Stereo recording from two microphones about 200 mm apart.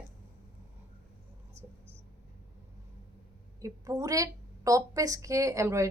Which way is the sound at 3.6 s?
15° right (ahead or behind).